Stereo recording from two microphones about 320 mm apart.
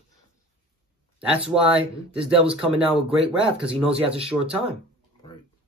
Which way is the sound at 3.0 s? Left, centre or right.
Centre.